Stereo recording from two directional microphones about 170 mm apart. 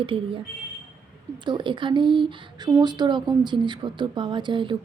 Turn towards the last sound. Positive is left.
turn(degrees=-30)  # may be behind; listen again after turning